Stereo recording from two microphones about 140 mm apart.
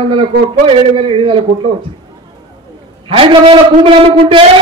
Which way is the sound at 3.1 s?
40° right (ahead or behind).